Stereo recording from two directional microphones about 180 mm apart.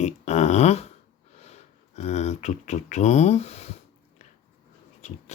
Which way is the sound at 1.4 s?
35° left (ahead or behind).